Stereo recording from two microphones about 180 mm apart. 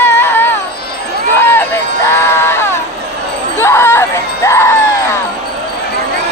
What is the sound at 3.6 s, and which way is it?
Music, 15° left (ahead or behind).